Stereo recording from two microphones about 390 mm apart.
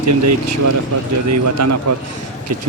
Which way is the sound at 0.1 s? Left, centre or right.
Right.